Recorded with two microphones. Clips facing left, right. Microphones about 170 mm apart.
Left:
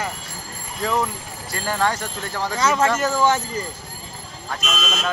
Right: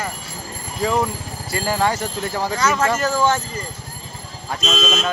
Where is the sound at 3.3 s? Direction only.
20° left (ahead or behind).